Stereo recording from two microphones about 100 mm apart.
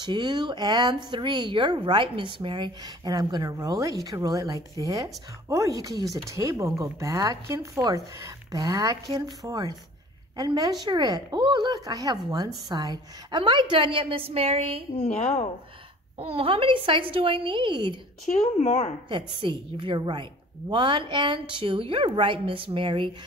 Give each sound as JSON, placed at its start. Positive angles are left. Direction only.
{"t": 0.0, "sound": "a woman's voice", "side_deg": -50}
{"t": 3.1, "sound": "a woman's voice", "side_deg": -45}
{"t": 15.0, "sound": "a woman's voice", "side_deg": 80}
{"t": 16.2, "sound": "a woman's voice", "side_deg": -75}
{"t": 18.6, "sound": "speech", "side_deg": 90}
{"t": 19.0, "sound": "a woman's voice", "side_deg": -50}